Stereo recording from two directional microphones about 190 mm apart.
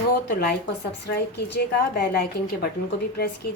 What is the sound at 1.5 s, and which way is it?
A woman's voice, 55° left (ahead or behind).